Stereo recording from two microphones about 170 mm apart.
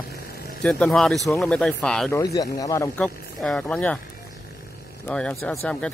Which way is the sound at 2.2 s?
20° left (ahead or behind).